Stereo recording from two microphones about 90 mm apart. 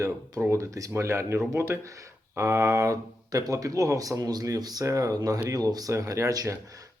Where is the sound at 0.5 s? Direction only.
35° right (ahead or behind).